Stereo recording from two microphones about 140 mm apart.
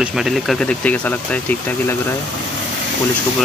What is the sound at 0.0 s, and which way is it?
Speech, centre (ahead or behind).